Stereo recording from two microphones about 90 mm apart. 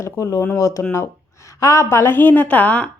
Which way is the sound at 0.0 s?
35° left (ahead or behind).